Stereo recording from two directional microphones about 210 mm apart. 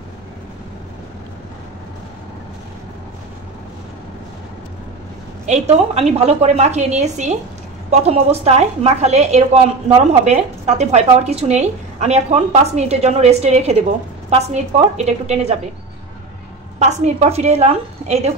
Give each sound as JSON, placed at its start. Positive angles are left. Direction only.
{"t": 5.5, "sound": "a woman's voice", "side_deg": -30}
{"t": 16.8, "sound": "a woman's voice", "side_deg": -30}